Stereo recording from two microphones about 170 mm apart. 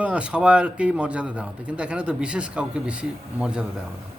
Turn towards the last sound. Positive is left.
turn(degrees=-5)  # may be behind; listen again after turning